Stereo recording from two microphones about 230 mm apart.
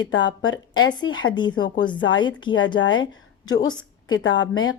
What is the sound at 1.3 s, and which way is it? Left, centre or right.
Speech, centre.